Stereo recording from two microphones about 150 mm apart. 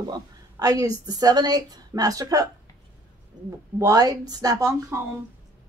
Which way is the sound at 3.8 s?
25° right (ahead or behind).